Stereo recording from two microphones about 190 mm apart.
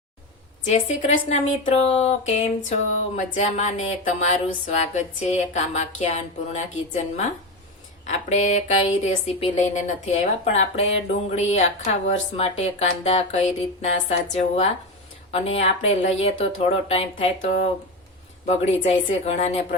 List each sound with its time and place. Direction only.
0.7 s speech: 35° left (ahead or behind)
8.0 s speech: 40° left (ahead or behind)